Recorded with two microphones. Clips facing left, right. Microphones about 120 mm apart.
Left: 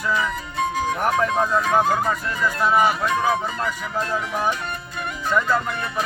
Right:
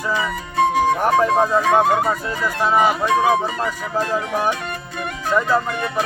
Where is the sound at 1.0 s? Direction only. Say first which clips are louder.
Right 4 dB; 35° right (ahead or behind).